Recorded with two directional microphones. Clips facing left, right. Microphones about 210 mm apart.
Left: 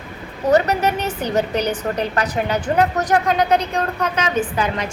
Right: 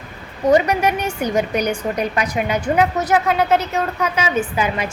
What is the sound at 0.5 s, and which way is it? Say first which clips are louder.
A woman's voice: even; 10° right (ahead or behind).